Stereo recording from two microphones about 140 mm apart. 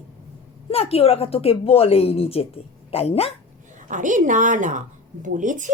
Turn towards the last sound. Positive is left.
turn(degrees=-65)  # may be behind; listen again after turning